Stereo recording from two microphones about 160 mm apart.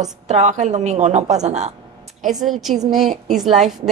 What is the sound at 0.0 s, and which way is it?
A woman's voice, 45° right (ahead or behind).